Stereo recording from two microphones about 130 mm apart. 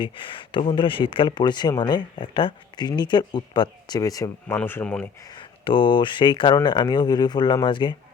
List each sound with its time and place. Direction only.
0.0 s speech: 40° left (ahead or behind); by 5.0 s 10° left (ahead or behind)
5.2 s speech: 35° left (ahead or behind)